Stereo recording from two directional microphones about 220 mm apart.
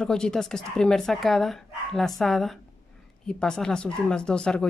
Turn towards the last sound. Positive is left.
turn(degrees=5)  # may be behind; listen again after turning